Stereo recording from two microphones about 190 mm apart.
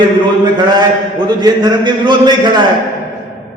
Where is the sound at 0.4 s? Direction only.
25° right (ahead or behind).